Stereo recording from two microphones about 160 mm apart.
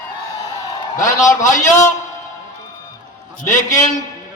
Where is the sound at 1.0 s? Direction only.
50° left (ahead or behind).